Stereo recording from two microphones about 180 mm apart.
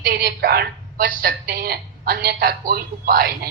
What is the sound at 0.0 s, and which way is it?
A woman's voice, 60° right (ahead or behind).